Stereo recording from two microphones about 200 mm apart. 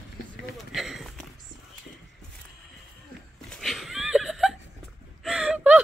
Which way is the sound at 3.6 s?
Centre (ahead or behind).